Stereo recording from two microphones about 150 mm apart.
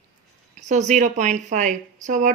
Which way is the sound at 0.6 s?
55° right (ahead or behind).